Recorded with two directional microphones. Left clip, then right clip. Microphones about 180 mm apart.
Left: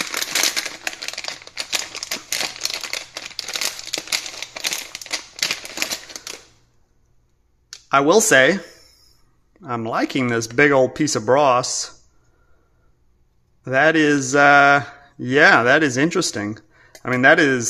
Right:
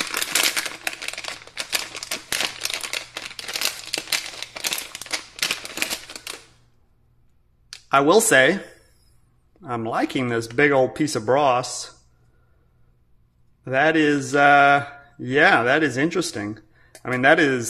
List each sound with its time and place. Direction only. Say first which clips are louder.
0.0 s a sound: left 1 dB; 5° left (ahead or behind)
2.1 s crumpling: even; centre (ahead or behind)
7.9 s mantra: left 2 dB; 10° left (ahead or behind)
13.7 s mantra: left 3 dB; 15° left (ahead or behind)